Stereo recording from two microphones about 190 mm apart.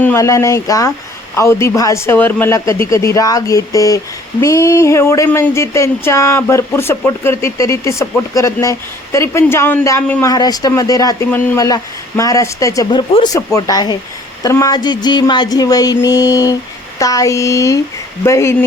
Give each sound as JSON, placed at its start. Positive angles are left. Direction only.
{"t": 0.0, "sound": "speech", "side_deg": 15}